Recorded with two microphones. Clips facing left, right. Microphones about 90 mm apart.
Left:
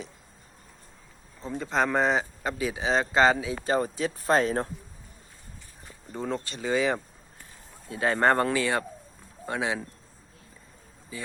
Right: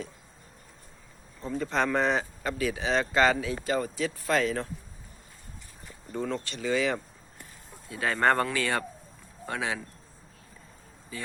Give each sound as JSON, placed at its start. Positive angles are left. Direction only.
{"t": 1.5, "sound": "speech", "side_deg": 15}
{"t": 2.4, "sound": "speech", "side_deg": 20}
{"t": 3.6, "sound": "speech", "side_deg": 30}
{"t": 6.3, "sound": "speech", "side_deg": 30}